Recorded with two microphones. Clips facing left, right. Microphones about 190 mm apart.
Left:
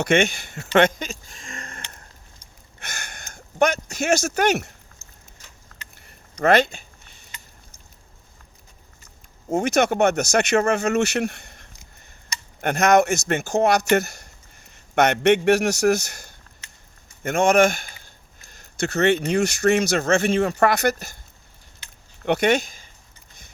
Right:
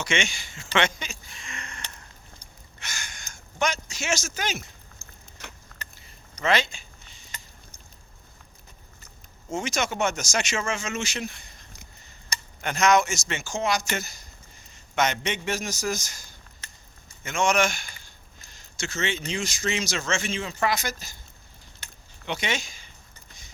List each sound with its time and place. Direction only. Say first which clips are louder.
0.0 s speech: left 9 dB; 55° left (ahead or behind)
2.7 s a sound: left 3 dB; 55° left (ahead or behind)
5.0 s a sound: right 2 dB; 35° right (ahead or behind)
5.4 s vehicle: right 10 dB; 70° right (ahead or behind)
6.4 s speech: left 7 dB; 60° left (ahead or behind)
7.3 s a sound: right 1 dB; 40° right (ahead or behind)
9.5 s speech: left 9 dB; 60° left (ahead or behind)
12.6 s a man's voice: left 5 dB; 55° left (ahead or behind)
22.3 s speech: left 11 dB; 60° left (ahead or behind)